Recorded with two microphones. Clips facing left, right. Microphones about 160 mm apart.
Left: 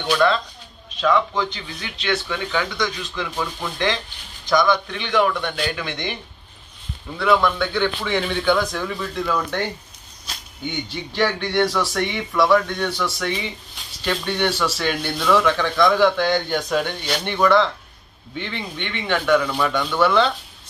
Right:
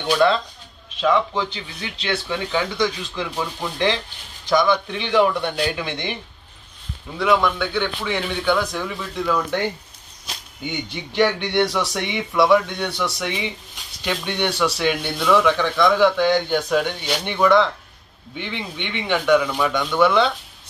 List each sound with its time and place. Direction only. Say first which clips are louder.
1.0 s speech: even; 25° right (ahead or behind)
7.2 s speech: even; 15° right (ahead or behind)
10.2 s a sound: left 1 dB; 10° right (ahead or behind)
11.1 s speech: right 2 dB; 15° right (ahead or behind)